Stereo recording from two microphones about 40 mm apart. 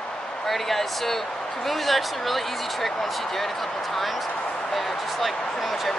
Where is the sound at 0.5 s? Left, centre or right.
Centre.